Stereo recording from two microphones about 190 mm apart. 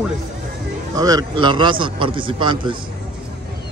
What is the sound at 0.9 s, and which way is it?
A man's voice, 20° right (ahead or behind).